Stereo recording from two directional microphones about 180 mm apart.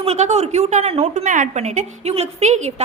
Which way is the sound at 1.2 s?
45° right (ahead or behind).